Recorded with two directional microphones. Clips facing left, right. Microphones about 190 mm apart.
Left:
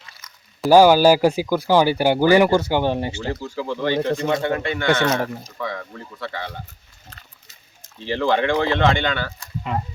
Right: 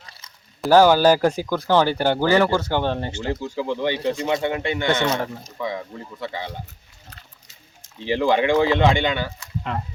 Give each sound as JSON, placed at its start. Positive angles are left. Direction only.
{"t": 0.0, "sound": "a sound", "side_deg": -30}
{"t": 0.7, "sound": "speech", "side_deg": 10}
{"t": 3.2, "sound": "speech", "side_deg": -20}
{"t": 5.1, "sound": "speech", "side_deg": 5}
{"t": 5.5, "sound": "speech", "side_deg": -15}
{"t": 8.0, "sound": "speech", "side_deg": -15}
{"t": 9.7, "sound": "speech", "side_deg": 0}